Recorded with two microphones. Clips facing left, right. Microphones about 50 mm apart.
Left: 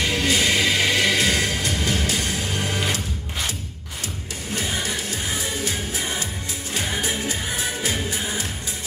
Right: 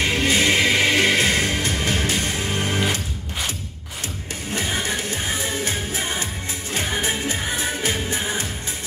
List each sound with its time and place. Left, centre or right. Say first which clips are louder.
0.0 s music: right 2 dB; right
4.5 s music: right 2 dB; right